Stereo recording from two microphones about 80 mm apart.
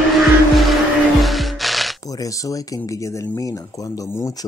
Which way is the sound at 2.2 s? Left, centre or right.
Left.